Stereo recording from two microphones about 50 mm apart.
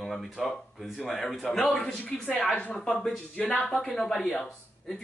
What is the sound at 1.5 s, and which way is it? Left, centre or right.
Speech, left.